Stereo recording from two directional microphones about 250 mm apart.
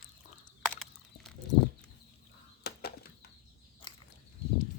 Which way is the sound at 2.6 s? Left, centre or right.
Left.